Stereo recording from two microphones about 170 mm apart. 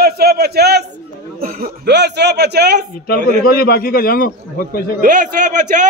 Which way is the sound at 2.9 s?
60° left (ahead or behind).